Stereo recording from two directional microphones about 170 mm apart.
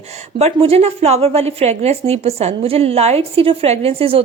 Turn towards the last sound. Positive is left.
turn(degrees=-35)  # may be behind; listen again after turning